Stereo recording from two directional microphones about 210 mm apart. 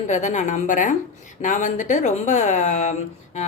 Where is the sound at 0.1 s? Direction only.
35° left (ahead or behind).